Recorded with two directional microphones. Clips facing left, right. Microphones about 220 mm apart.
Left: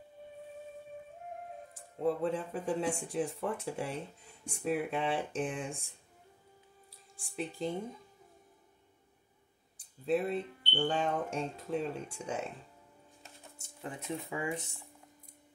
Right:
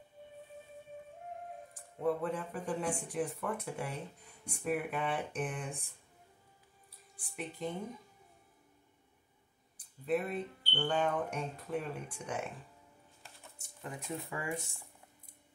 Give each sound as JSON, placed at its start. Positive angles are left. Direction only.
{"t": 2.0, "sound": "speech", "side_deg": 25}
{"t": 7.2, "sound": "speech", "side_deg": 25}
{"t": 9.8, "sound": "speech", "side_deg": 30}
{"t": 13.2, "sound": "a sound", "side_deg": 20}